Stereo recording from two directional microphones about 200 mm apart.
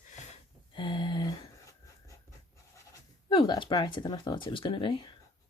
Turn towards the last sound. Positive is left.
turn(degrees=25)  # may be behind; listen again after turning